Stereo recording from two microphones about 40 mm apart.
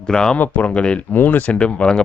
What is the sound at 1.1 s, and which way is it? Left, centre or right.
Speech, left.